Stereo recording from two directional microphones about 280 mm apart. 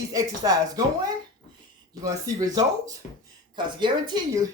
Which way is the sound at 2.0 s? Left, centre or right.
Centre.